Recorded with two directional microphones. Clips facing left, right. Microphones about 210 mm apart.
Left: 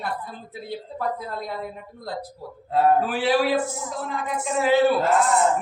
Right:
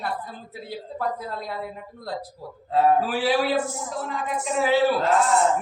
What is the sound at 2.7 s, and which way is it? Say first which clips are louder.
Speech: even; centre (ahead or behind).